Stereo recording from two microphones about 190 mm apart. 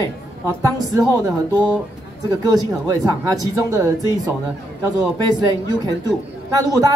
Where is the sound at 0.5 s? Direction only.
20° right (ahead or behind).